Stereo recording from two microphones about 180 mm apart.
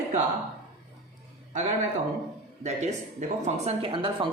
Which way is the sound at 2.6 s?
40° right (ahead or behind).